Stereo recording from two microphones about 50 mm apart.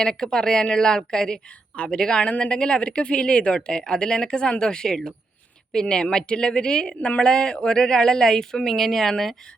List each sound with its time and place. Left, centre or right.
0.0 s speech: centre